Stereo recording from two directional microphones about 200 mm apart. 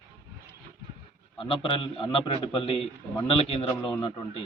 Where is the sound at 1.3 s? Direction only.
25° left (ahead or behind).